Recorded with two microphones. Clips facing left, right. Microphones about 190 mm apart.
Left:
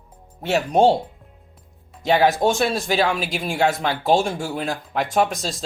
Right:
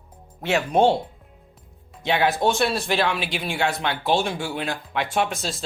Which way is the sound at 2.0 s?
40° left (ahead or behind).